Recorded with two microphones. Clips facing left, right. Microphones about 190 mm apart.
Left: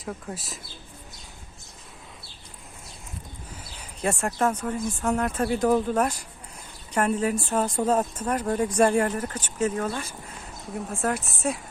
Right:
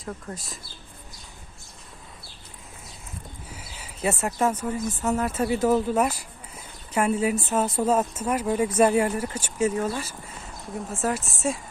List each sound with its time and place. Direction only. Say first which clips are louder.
0.0 s speech: left 1 dB; 5° left (ahead or behind)
3.5 s speech: right 1 dB; 5° right (ahead or behind)